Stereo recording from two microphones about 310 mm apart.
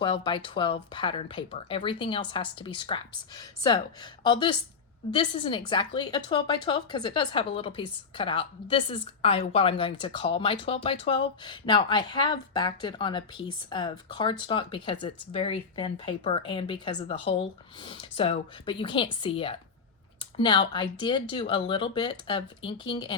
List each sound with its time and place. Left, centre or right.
0.0 s a woman's voice: centre